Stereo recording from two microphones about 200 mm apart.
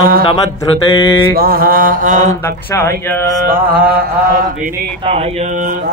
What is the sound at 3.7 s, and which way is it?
Mantra, 50° right (ahead or behind).